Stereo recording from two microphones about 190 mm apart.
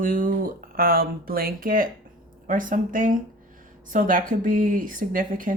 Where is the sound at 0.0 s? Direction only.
45° right (ahead or behind).